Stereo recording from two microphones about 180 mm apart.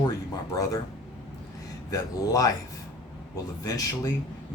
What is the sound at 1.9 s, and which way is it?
Speech, 20° left (ahead or behind).